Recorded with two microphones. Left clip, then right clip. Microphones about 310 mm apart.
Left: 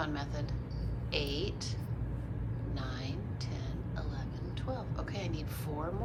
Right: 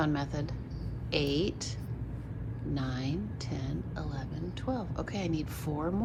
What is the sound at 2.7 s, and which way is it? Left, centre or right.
Vehicle, right.